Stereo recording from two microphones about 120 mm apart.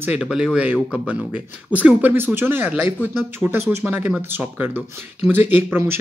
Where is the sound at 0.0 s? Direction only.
10° right (ahead or behind).